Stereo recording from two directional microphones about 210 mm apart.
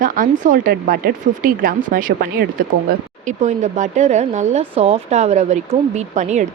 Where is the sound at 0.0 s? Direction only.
40° right (ahead or behind).